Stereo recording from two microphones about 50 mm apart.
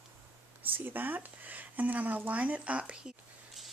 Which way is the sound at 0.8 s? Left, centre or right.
Right.